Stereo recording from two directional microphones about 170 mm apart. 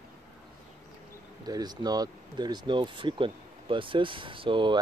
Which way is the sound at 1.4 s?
25° right (ahead or behind).